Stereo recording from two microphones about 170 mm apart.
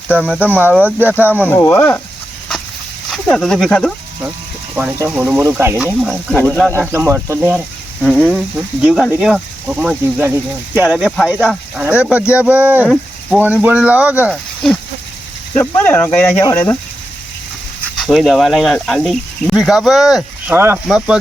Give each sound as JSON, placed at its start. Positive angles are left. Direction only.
{"t": 0.3, "sound": "speech", "side_deg": -10}
{"t": 1.5, "sound": "speech", "side_deg": 10}
{"t": 3.1, "sound": "speech", "side_deg": 0}
{"t": 4.7, "sound": "speech", "side_deg": -10}
{"t": 8.0, "sound": "speech", "side_deg": 5}
{"t": 15.5, "sound": "speech", "side_deg": 10}
{"t": 18.0, "sound": "speech", "side_deg": 0}
{"t": 20.5, "sound": "speech", "side_deg": -15}
{"t": 20.8, "sound": "speech", "side_deg": -5}